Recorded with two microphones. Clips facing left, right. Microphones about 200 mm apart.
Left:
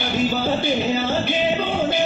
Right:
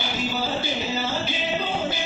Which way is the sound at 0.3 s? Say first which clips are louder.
Left 4 dB; 60° left (ahead or behind).